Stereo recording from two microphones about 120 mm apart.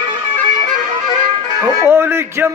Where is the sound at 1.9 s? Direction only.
20° right (ahead or behind).